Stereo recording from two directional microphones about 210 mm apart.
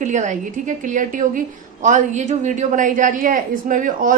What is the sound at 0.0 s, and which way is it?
A woman's voice, 35° right (ahead or behind).